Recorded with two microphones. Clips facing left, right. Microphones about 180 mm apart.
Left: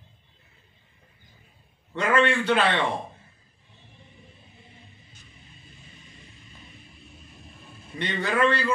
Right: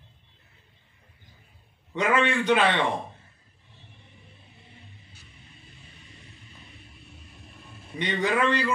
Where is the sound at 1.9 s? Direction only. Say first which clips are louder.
Left 1 dB; 15° right (ahead or behind).